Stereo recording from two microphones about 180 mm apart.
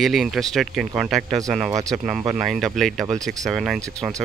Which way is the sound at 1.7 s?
20° right (ahead or behind).